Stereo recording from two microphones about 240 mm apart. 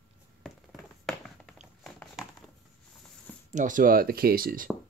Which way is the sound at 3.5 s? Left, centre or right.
Right.